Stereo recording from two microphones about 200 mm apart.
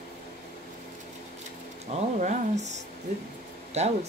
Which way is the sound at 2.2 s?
35° right (ahead or behind).